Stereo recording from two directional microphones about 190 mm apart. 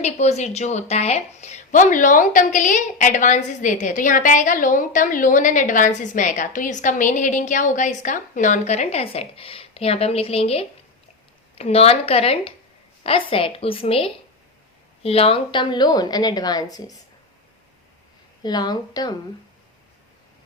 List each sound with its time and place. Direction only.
0.0 s a woman's voice: 35° left (ahead or behind); by 16.9 s 20° left (ahead or behind)
18.4 s a woman's voice: 20° left (ahead or behind)